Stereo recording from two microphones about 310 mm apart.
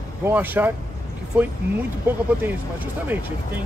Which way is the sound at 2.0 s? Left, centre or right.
Centre.